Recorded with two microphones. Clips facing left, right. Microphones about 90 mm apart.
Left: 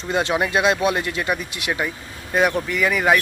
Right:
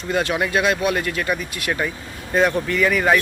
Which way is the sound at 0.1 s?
25° left (ahead or behind).